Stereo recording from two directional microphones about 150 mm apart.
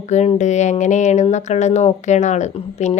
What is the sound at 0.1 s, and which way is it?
Speech, 50° left (ahead or behind).